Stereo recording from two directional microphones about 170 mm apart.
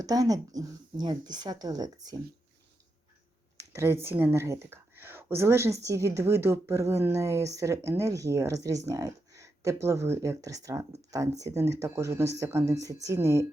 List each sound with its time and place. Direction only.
0.0 s speech: 20° right (ahead or behind)
3.7 s speech: 15° right (ahead or behind)